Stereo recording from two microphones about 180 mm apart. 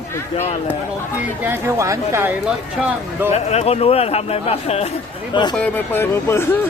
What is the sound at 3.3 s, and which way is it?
Speech, 35° left (ahead or behind).